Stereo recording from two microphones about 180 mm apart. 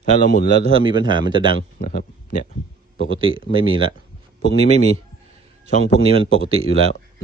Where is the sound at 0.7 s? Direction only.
25° right (ahead or behind).